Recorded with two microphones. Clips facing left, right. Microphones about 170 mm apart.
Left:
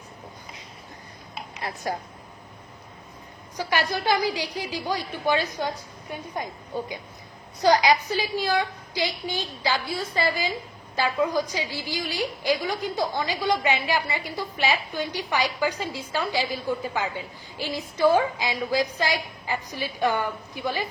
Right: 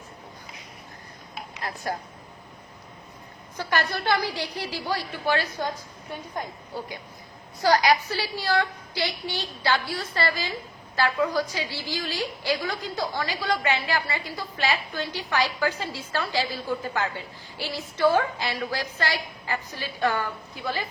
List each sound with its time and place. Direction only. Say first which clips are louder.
1.6 s speech: left 1 dB; 20° left (ahead or behind)
3.6 s a woman's voice: left 1 dB; 15° left (ahead or behind)
7.6 s a woman's voice: left 1 dB; 20° left (ahead or behind)